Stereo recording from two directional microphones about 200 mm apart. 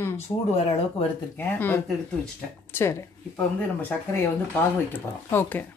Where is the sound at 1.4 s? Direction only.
10° left (ahead or behind).